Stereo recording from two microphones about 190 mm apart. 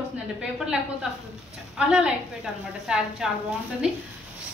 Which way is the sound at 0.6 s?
5° right (ahead or behind).